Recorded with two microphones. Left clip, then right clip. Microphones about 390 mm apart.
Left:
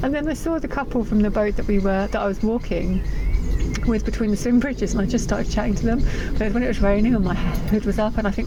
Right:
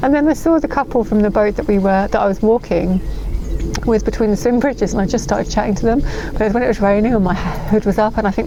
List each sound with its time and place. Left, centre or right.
0.0 s speech: right